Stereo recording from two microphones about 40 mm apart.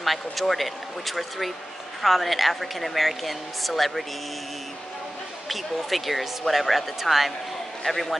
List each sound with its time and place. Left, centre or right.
0.0 s a woman's voice: centre
5.5 s a woman's voice: centre